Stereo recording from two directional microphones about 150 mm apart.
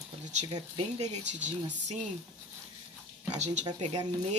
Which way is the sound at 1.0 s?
50° right (ahead or behind).